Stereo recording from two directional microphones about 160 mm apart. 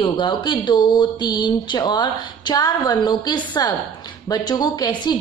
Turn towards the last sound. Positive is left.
turn(degrees=30)  # may be behind; listen again after turning